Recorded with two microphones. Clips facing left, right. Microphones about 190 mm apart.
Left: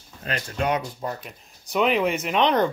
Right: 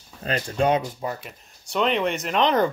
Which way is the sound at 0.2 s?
30° right (ahead or behind).